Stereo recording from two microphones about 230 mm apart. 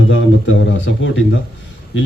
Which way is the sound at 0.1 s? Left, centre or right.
Left.